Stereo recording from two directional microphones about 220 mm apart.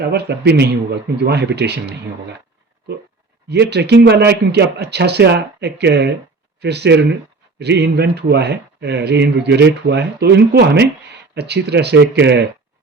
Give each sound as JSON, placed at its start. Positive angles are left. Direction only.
{"t": 0.0, "sound": "speech", "side_deg": -50}
{"t": 3.5, "sound": "speech", "side_deg": -50}